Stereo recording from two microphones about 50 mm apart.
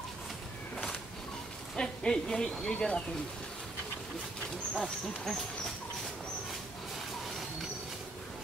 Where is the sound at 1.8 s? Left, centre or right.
Centre.